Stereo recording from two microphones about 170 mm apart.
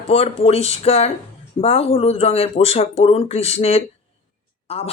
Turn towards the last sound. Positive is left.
turn(degrees=35)  # may be behind; listen again after turning